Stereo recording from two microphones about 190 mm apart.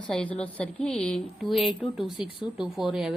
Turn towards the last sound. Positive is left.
turn(degrees=-5)  # may be behind; listen again after turning